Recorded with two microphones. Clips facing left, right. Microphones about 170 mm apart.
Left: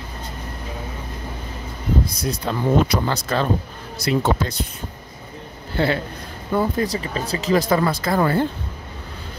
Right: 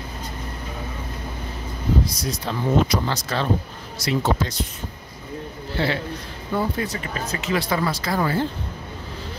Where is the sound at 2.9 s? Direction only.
50° left (ahead or behind).